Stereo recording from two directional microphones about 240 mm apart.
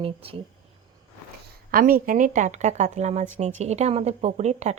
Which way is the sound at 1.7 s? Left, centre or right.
Right.